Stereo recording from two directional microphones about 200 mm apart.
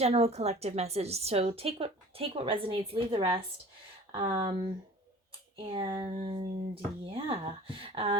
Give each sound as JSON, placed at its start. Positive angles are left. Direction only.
{"t": 0.0, "sound": "a woman's voice", "side_deg": -30}
{"t": 5.5, "sound": "a woman's voice", "side_deg": -25}